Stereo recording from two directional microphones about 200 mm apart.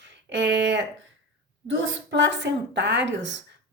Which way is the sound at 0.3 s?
60° right (ahead or behind).